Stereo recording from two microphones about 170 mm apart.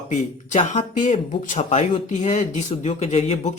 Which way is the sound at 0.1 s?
40° left (ahead or behind).